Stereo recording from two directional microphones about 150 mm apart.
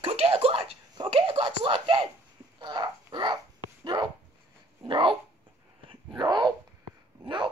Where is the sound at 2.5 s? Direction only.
30° right (ahead or behind).